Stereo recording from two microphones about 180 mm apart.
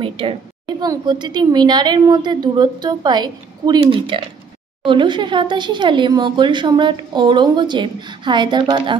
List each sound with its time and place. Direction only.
0.0 s a woman's voice: 30° right (ahead or behind)